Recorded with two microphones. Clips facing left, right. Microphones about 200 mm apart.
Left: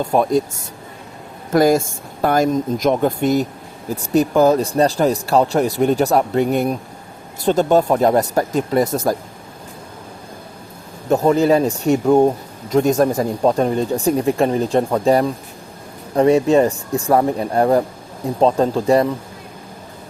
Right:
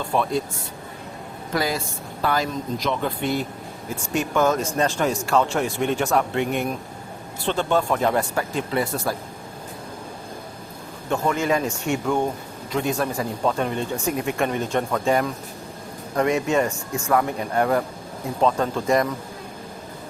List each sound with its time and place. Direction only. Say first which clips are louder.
0.0 s speech: left 7 dB; 45° left (ahead or behind)
1.5 s speech: left 11 dB; 45° left (ahead or behind)
11.1 s speech: left 8 dB; 35° left (ahead or behind)